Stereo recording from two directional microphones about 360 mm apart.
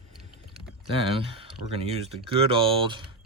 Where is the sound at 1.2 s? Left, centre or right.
Centre.